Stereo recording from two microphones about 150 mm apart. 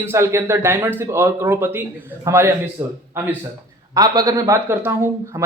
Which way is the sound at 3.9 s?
25° right (ahead or behind).